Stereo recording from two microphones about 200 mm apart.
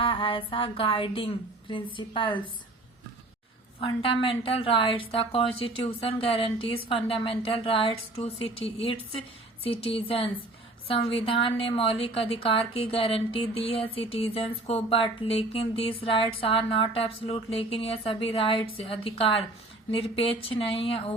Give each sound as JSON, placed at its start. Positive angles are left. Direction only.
{"t": 0.0, "sound": "a woman's voice", "side_deg": 25}
{"t": 4.2, "sound": "a woman's voice", "side_deg": 25}